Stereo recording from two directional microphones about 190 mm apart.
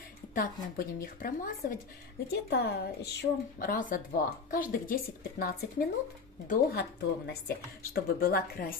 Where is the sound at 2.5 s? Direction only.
60° left (ahead or behind).